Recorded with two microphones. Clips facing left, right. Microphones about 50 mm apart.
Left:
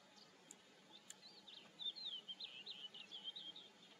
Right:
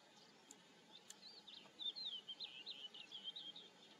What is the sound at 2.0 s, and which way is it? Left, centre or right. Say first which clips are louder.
Bird: even; centre.